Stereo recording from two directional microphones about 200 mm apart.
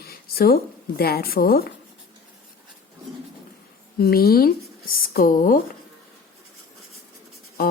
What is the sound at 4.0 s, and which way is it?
A woman's voice, 50° left (ahead or behind).